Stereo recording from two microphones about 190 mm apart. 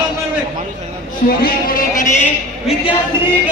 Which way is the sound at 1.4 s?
50° left (ahead or behind).